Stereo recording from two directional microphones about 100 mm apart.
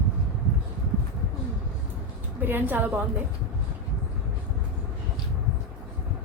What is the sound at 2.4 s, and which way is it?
Speech, 20° right (ahead or behind).